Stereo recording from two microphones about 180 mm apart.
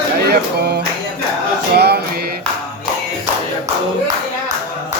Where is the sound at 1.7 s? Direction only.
60° right (ahead or behind).